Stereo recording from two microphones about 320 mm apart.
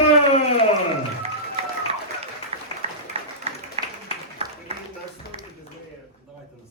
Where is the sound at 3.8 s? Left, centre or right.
Centre.